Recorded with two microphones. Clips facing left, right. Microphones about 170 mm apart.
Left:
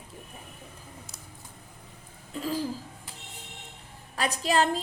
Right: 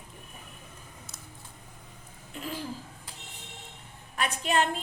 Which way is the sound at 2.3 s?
40° left (ahead or behind).